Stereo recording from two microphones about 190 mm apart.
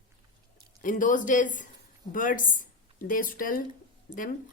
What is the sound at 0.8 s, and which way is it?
A woman's voice, 45° left (ahead or behind).